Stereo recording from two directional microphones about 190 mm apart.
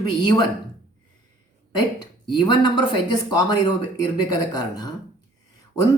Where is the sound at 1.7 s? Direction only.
25° left (ahead or behind).